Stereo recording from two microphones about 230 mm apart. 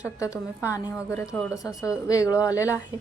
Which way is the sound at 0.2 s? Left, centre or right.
Centre.